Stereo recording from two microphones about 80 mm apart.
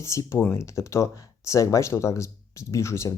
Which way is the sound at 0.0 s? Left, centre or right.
Left.